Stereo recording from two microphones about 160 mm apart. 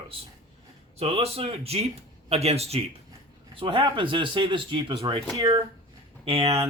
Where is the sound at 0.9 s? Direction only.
40° right (ahead or behind).